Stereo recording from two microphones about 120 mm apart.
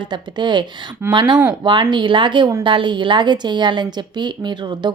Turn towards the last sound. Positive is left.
turn(degrees=-40)  # may be behind; listen again after turning